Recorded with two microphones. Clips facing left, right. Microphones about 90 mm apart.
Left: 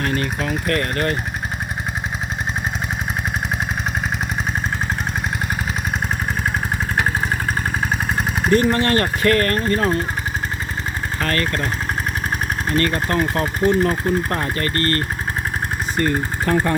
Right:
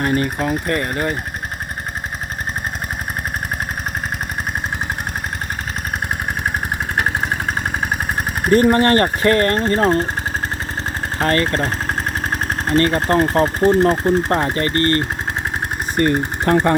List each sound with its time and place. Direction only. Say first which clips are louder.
0.0 s speech: right 3 dB; 25° right (ahead or behind)
0.7 s speech: even; 15° right (ahead or behind)
8.4 s speech: right 4 dB; 45° right (ahead or behind)
9.2 s speech: right 2 dB; 30° right (ahead or behind)
11.2 s speech: right 5 dB; 30° right (ahead or behind)
16.0 s speech: right 4 dB; 50° right (ahead or behind)